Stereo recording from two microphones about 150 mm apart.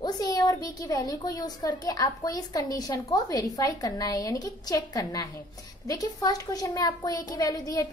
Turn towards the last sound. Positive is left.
turn(degrees=25)  # may be behind; listen again after turning